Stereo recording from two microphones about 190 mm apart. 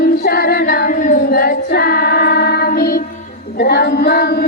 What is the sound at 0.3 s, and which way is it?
Female singing, 55° left (ahead or behind).